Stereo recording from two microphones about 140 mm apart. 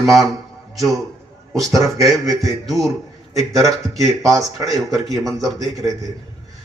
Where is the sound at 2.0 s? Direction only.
Centre (ahead or behind).